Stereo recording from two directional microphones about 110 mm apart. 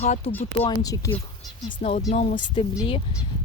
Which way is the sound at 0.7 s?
35° left (ahead or behind).